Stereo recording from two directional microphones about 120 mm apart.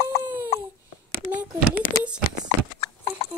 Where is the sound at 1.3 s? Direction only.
10° right (ahead or behind).